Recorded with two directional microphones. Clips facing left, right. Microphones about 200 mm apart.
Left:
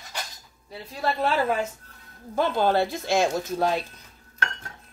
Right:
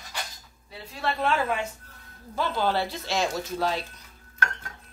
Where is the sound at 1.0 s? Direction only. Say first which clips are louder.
Left 2 dB; 35° left (ahead or behind).